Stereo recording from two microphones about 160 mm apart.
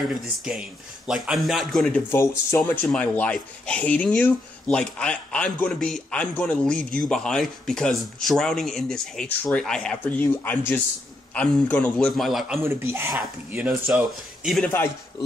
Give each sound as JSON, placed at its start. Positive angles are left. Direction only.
{"t": 0.4, "sound": "a man's voice", "side_deg": -5}
{"t": 2.0, "sound": "a man's voice", "side_deg": 15}
{"t": 12.6, "sound": "speech", "side_deg": -15}
{"t": 14.1, "sound": "a man's voice", "side_deg": 0}